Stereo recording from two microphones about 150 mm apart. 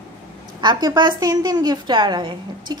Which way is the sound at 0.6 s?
30° right (ahead or behind).